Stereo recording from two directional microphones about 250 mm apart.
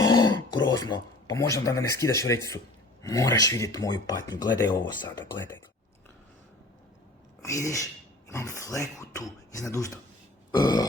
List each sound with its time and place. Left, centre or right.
0.0 s a sound: centre
3.0 s speech: centre
7.4 s speech: centre